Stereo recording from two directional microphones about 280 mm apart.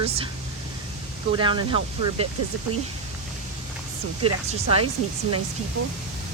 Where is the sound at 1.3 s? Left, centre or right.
Centre.